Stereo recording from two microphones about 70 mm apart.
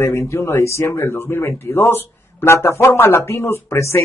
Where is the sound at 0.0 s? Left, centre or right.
Left.